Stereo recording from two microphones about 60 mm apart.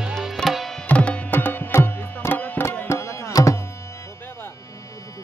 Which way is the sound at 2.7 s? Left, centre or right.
Left.